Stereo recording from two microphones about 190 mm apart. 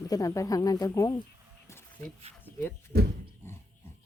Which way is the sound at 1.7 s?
15° left (ahead or behind).